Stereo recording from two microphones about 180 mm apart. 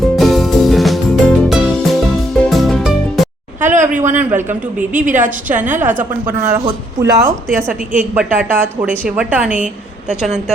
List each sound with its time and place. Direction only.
0.2 s music: centre (ahead or behind)
3.6 s a sound: 45° right (ahead or behind)
4.1 s a woman's voice: 10° right (ahead or behind)
4.9 s a woman's voice: 45° right (ahead or behind)
5.5 s a woman's voice: 10° right (ahead or behind)